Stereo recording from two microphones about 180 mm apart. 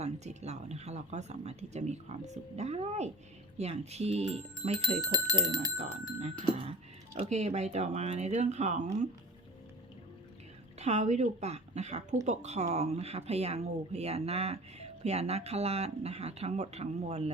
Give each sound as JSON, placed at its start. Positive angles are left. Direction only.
{"t": 0.0, "sound": "speech", "side_deg": -35}
{"t": 5.7, "sound": "speech", "side_deg": -35}
{"t": 10.8, "sound": "speech", "side_deg": -40}